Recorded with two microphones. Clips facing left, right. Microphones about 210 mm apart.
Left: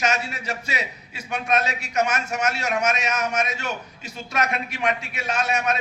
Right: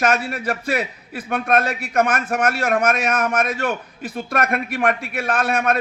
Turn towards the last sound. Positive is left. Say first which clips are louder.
# right 4 dB
turn(degrees=-55)  # may be behind; listen again after turning